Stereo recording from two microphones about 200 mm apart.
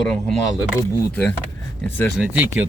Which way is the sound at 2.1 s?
5° right (ahead or behind).